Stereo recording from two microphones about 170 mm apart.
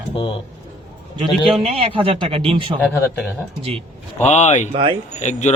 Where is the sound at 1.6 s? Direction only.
35° right (ahead or behind).